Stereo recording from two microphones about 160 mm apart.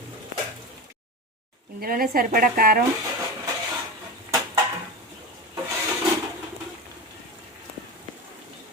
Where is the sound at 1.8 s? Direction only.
65° right (ahead or behind).